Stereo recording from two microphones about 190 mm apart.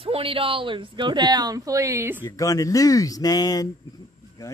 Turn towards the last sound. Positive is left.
turn(degrees=15)  # may be behind; listen again after turning